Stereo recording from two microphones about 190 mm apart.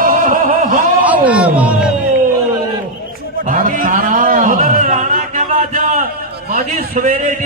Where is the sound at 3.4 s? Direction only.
45° right (ahead or behind).